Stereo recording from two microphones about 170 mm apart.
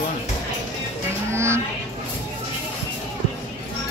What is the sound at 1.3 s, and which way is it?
Music, 15° right (ahead or behind).